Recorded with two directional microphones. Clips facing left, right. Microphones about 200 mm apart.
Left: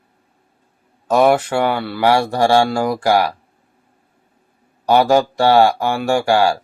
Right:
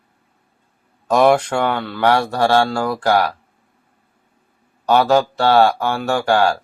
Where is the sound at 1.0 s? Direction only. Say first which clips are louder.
Even; 5° left (ahead or behind).